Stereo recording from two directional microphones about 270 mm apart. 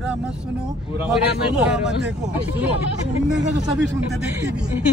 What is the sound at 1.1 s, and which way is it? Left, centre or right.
Speech, centre.